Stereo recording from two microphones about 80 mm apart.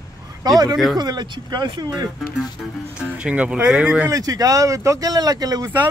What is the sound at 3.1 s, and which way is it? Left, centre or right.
Speech, centre.